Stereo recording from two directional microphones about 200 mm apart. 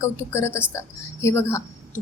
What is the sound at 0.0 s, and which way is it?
A woman's voice, 15° left (ahead or behind).